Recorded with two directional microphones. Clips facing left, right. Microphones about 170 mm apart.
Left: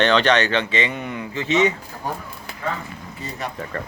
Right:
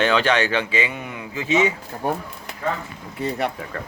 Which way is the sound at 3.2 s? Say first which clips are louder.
Right 7 dB; 65° right (ahead or behind).